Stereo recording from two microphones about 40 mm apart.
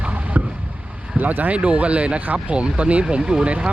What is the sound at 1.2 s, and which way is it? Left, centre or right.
Speech, right.